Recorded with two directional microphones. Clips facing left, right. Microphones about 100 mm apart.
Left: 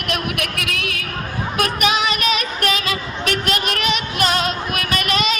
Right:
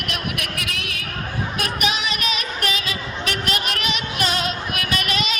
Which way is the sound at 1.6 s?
60° left (ahead or behind).